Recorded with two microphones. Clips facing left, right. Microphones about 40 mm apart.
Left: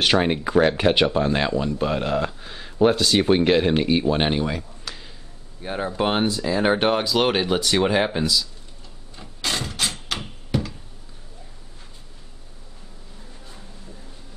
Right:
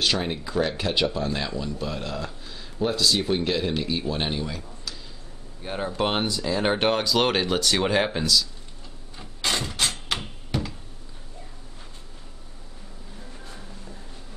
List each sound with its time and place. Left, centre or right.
0.0 s speech: left
5.6 s speech: centre
9.1 s a sound: centre